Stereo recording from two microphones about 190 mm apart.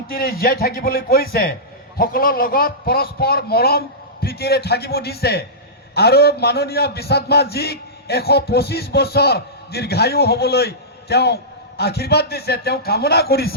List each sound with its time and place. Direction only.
0.1 s a man's voice: 50° left (ahead or behind)